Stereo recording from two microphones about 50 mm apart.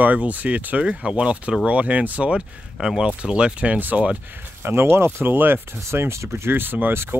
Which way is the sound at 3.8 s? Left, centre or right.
Right.